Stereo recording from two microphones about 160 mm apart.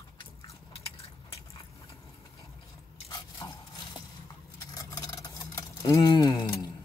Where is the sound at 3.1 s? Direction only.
25° left (ahead or behind).